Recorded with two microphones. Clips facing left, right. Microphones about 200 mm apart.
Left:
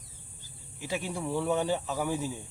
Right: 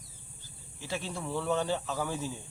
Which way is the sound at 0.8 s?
15° left (ahead or behind).